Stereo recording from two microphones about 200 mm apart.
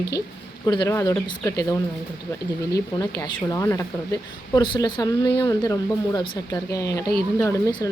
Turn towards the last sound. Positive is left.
turn(degrees=15)  # may be behind; listen again after turning